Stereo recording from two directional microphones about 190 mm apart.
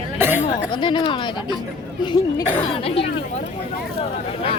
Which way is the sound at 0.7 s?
25° left (ahead or behind).